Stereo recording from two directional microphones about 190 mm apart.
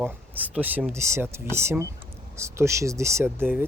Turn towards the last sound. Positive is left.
turn(degrees=-10)  # may be behind; listen again after turning